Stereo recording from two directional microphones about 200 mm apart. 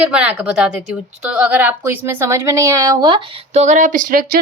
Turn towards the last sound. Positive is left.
turn(degrees=-45)  # may be behind; listen again after turning